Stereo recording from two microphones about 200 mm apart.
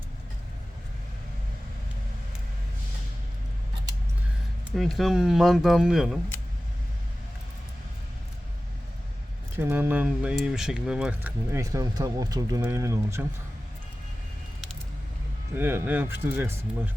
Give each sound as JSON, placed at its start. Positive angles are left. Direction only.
{"t": 4.7, "sound": "speech", "side_deg": 0}
{"t": 9.6, "sound": "speech", "side_deg": -10}
{"t": 15.5, "sound": "speech", "side_deg": -10}